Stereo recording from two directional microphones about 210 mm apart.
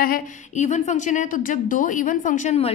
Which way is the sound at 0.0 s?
40° left (ahead or behind).